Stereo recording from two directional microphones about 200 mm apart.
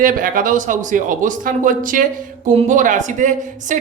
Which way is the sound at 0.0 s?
40° right (ahead or behind).